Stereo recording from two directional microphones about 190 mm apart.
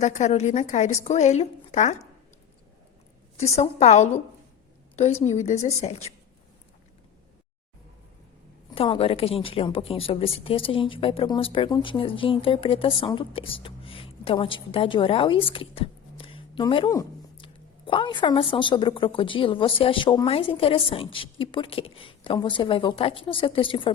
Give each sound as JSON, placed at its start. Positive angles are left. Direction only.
{"t": 0.0, "sound": "a woman's voice", "side_deg": 40}
{"t": 3.3, "sound": "a woman's voice", "side_deg": 35}
{"t": 8.7, "sound": "a woman's voice", "side_deg": 30}